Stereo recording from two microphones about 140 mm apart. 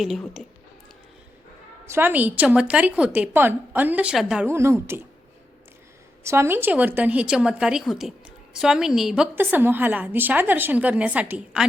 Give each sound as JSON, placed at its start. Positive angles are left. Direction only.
{"t": 0.0, "sound": "speech", "side_deg": 0}
{"t": 1.9, "sound": "a woman's voice", "side_deg": -15}
{"t": 4.4, "sound": "a woman's voice", "side_deg": -20}
{"t": 6.2, "sound": "a woman's voice", "side_deg": -20}